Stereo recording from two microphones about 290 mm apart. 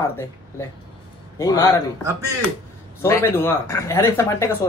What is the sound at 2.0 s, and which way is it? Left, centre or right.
Speech, centre.